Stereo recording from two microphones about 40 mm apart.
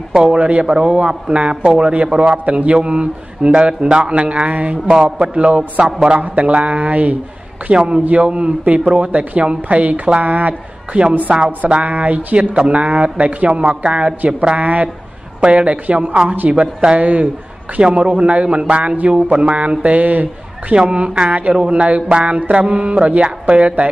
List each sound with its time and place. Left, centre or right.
0.1 s a man's voice: right
0.4 s a man's voice: right
5.9 s a man's voice: centre
6.1 s mantra: right
8.1 s a man's voice: right
8.9 s mantra: right
10.2 s speech: right
11.3 s a man's voice: right
11.7 s mantra: right
12.4 s mantra: right
14.6 s mantra: right
19.3 s a man's voice: right
20.7 s a man's voice: right
21.6 s mantra: right